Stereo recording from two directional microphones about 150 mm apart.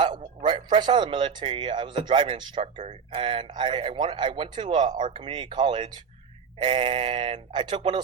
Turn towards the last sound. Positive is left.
turn(degrees=-30)  # may be behind; listen again after turning